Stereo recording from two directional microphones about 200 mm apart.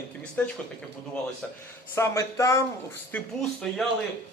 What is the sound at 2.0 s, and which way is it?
Speech, 15° left (ahead or behind).